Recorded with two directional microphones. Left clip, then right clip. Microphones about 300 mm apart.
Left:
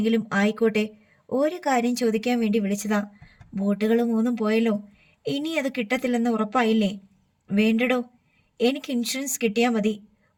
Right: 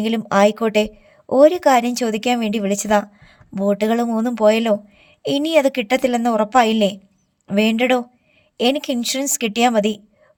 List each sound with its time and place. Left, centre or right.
0.0 s speech: right